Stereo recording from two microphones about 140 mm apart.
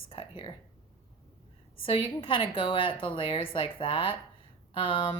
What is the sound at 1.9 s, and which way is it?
Speech, 40° left (ahead or behind).